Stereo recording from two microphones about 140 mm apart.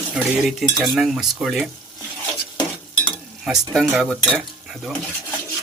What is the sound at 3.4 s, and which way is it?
Stir, 5° right (ahead or behind).